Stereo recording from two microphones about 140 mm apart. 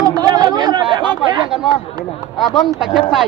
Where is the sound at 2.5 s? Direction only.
Centre (ahead or behind).